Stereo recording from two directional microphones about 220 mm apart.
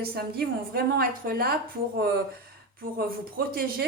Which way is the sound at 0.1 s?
45° right (ahead or behind).